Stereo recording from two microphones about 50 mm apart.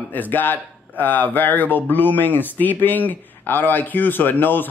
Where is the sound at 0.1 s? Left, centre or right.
Left.